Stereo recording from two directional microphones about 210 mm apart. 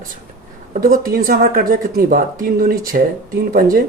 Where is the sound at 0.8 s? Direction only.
45° right (ahead or behind).